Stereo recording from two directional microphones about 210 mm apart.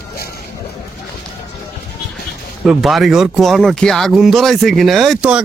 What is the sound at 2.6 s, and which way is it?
Speech, centre (ahead or behind).